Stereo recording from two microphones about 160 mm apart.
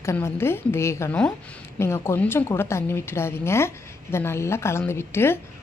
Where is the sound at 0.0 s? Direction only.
15° left (ahead or behind).